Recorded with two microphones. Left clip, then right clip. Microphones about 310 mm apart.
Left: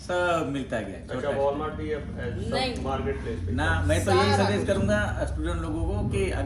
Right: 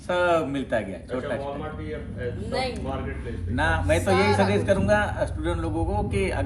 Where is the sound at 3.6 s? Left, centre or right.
Centre.